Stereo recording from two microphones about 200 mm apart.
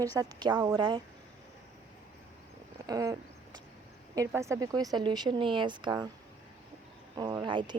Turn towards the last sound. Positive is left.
turn(degrees=-20)  # may be behind; listen again after turning